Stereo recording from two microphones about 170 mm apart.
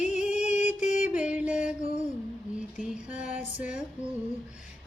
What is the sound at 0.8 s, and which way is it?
Music, 45° left (ahead or behind).